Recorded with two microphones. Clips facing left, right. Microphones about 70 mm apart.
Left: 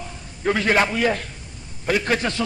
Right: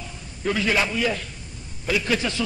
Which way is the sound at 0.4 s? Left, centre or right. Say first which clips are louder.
Left 4 dB; left.